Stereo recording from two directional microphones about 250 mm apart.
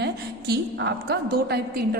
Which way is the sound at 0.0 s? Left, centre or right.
Right.